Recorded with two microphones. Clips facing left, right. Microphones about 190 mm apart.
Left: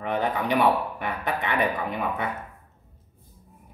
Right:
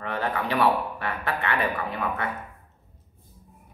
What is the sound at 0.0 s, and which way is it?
A man's voice, 15° left (ahead or behind).